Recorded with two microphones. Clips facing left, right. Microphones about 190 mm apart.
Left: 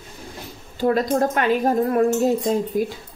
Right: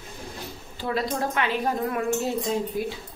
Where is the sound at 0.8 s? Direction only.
45° left (ahead or behind).